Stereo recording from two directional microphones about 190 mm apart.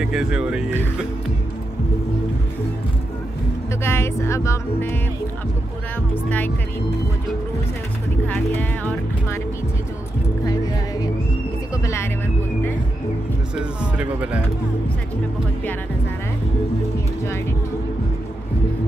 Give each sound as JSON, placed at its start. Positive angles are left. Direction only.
{"t": 0.0, "sound": "speech", "side_deg": -5}
{"t": 3.8, "sound": "speech", "side_deg": 15}
{"t": 8.3, "sound": "speech", "side_deg": 10}
{"t": 11.7, "sound": "speech", "side_deg": 15}
{"t": 13.6, "sound": "speech", "side_deg": -5}